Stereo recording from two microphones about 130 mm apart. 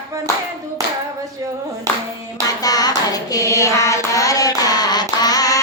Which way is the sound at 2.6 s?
30° left (ahead or behind).